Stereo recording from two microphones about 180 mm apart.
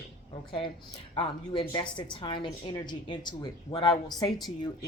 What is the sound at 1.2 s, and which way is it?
A woman's voice, 30° left (ahead or behind).